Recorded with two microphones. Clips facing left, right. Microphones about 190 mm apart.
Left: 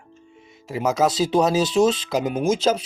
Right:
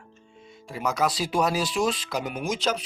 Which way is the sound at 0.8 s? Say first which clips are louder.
Left 6 dB; 25° left (ahead or behind).